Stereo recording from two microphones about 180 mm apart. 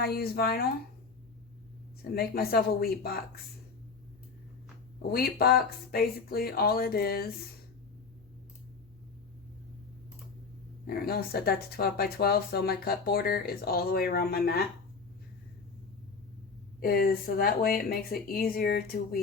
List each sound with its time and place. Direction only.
0.0 s speech: 60° left (ahead or behind)
2.0 s speech: 55° left (ahead or behind)
5.0 s speech: 60° left (ahead or behind)
10.8 s speech: 60° left (ahead or behind)
16.8 s speech: 55° left (ahead or behind)